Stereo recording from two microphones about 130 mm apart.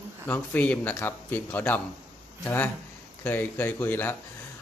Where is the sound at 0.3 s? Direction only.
10° left (ahead or behind).